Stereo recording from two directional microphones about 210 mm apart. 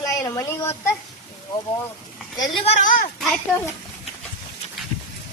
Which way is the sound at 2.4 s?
25° left (ahead or behind).